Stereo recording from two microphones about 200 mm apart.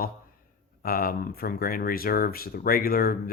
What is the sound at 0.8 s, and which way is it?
Speech, 45° left (ahead or behind).